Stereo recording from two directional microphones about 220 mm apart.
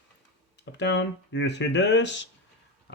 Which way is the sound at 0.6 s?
50° left (ahead or behind).